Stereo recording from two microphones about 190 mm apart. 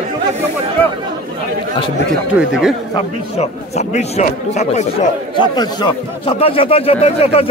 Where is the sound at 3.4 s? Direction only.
35° left (ahead or behind).